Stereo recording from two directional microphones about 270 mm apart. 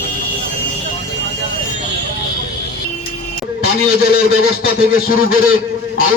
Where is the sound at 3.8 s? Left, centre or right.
Left.